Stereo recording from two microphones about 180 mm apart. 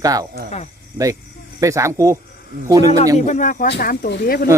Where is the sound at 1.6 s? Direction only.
15° right (ahead or behind).